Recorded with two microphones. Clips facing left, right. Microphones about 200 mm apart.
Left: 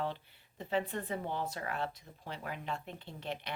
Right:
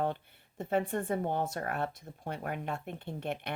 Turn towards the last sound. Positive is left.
turn(degrees=-55)  # may be behind; listen again after turning